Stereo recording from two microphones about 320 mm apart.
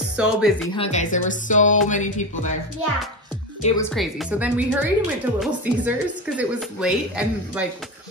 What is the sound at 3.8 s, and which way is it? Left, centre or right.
A woman's voice, centre.